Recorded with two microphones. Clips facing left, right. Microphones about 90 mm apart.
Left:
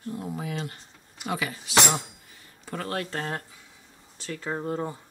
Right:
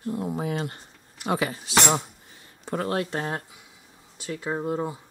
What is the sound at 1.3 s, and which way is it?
Speech, 35° right (ahead or behind).